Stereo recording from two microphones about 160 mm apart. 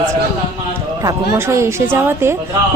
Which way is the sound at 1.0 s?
20° right (ahead or behind).